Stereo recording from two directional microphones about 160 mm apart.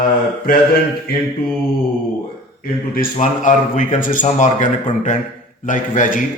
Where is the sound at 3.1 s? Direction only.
50° left (ahead or behind).